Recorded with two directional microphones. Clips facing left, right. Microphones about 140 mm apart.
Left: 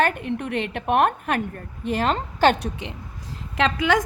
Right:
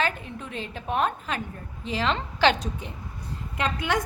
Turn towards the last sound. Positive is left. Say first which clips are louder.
# left 6 dB
turn(degrees=90)